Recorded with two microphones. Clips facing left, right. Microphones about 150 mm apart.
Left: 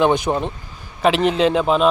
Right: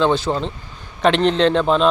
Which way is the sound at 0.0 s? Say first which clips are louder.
Left 1 dB; 15° left (ahead or behind).